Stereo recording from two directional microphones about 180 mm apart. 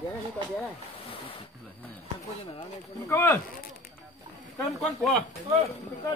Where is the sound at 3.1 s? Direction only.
15° left (ahead or behind).